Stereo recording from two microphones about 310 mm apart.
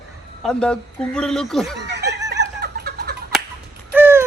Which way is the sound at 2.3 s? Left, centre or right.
Right.